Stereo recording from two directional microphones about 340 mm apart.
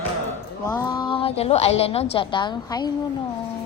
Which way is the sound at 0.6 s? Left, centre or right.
Centre.